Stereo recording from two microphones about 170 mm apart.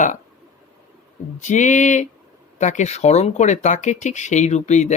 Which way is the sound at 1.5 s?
45° left (ahead or behind).